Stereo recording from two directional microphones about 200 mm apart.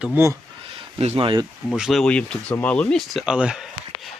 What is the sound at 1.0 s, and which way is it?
Speech, 30° right (ahead or behind).